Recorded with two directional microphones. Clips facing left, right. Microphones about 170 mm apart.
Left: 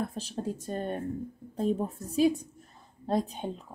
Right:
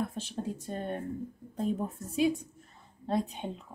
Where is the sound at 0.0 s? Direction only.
35° left (ahead or behind).